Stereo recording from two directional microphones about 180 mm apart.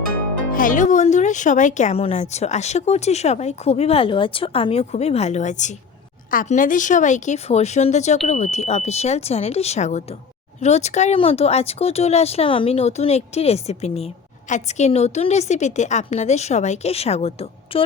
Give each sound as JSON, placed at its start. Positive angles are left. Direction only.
{"t": 0.5, "sound": "speech", "side_deg": 50}